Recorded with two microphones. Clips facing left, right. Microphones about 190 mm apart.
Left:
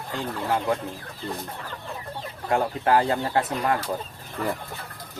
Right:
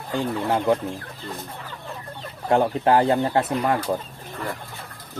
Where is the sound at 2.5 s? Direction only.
25° right (ahead or behind).